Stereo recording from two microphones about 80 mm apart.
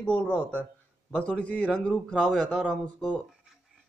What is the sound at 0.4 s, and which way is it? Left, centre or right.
Speech, right.